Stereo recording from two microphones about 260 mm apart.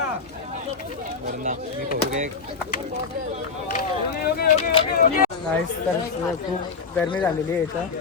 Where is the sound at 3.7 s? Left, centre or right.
Left.